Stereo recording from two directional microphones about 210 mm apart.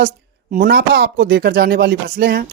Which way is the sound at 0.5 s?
45° right (ahead or behind).